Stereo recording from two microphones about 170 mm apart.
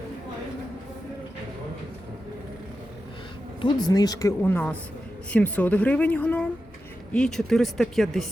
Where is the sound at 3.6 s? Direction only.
25° left (ahead or behind).